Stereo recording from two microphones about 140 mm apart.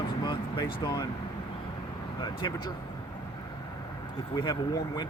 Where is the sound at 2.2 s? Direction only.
30° left (ahead or behind).